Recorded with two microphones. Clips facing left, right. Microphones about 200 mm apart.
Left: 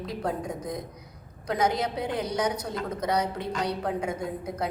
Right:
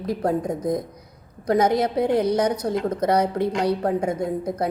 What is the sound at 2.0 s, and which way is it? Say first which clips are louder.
A woman's voice: right 9 dB; 55° right (ahead or behind).